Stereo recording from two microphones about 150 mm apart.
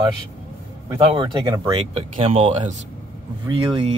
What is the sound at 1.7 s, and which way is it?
Speech, 40° right (ahead or behind).